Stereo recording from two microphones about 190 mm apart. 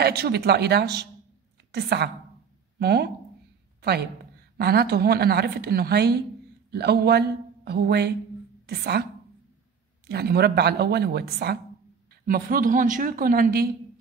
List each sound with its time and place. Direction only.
0.0 s a woman's voice: 55° right (ahead or behind)
4.6 s a woman's voice: 55° right (ahead or behind)
10.0 s a woman's voice: 60° right (ahead or behind)